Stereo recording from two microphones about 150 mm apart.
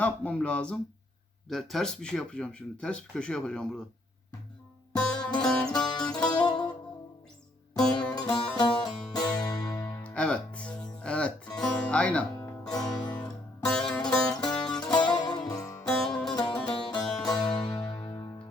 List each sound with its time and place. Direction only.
0.0 s speech: 10° left (ahead or behind)
4.9 s music: 5° left (ahead or behind)
6.3 s music: 30° left (ahead or behind)
7.8 s music: 5° left (ahead or behind)
8.1 s music: 30° left (ahead or behind)
10.0 s music: 5° left (ahead or behind)
14.9 s music: 30° left (ahead or behind)
15.8 s music: 5° left (ahead or behind)
16.9 s music: 25° left (ahead or behind)
17.4 s music: 5° left (ahead or behind)